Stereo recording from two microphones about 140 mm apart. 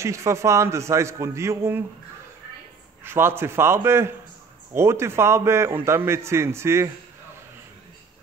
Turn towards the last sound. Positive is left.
turn(degrees=-20)  # may be behind; listen again after turning